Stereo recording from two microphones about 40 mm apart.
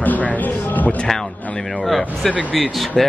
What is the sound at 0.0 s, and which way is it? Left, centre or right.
Music, left.